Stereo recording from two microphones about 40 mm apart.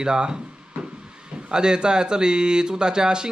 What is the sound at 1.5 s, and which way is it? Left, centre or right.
Speech, right.